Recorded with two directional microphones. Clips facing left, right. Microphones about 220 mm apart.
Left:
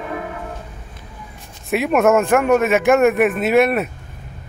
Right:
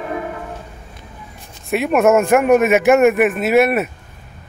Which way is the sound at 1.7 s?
Centre (ahead or behind).